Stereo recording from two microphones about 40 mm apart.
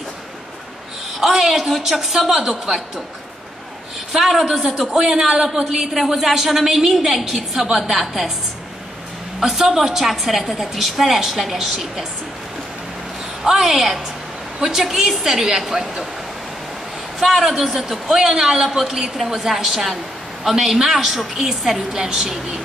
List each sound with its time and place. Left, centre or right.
1.2 s a woman's voice: centre
2.5 s a woman's voice: centre
4.1 s a woman's voice: centre
9.4 s a woman's voice: centre
13.4 s a woman's voice: centre
17.2 s a woman's voice: centre